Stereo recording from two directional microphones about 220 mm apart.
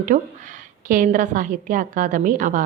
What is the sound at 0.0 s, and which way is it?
A woman's voice, 35° right (ahead or behind).